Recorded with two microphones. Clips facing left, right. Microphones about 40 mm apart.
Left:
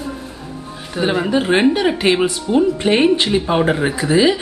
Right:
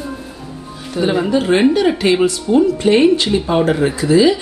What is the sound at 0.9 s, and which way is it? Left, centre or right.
Speech, centre.